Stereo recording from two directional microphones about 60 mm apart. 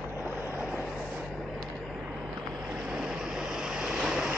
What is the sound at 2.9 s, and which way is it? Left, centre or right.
Vehicle, centre.